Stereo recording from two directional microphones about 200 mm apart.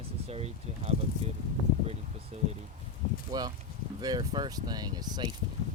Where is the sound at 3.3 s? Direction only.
20° right (ahead or behind).